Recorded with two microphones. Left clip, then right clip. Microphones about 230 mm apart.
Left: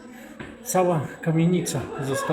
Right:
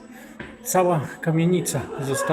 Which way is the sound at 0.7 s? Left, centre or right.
Centre.